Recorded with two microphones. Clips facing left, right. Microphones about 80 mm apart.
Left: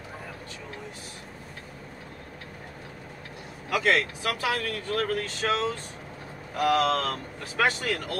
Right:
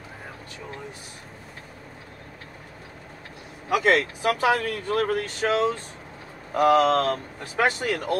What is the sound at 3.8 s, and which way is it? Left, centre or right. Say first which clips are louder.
Speech: right 4 dB; right.